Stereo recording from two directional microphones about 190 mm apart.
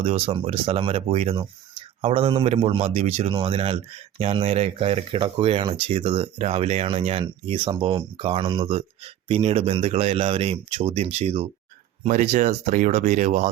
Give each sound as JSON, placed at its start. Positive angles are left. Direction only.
{"t": 0.0, "sound": "speech", "side_deg": -30}